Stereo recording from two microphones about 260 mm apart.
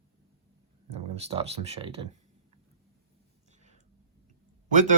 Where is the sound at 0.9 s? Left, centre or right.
Right.